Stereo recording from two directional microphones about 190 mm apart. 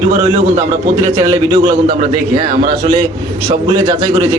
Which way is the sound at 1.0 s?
35° right (ahead or behind).